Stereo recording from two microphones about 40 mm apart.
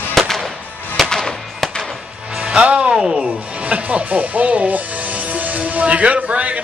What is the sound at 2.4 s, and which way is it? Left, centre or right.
Music, right.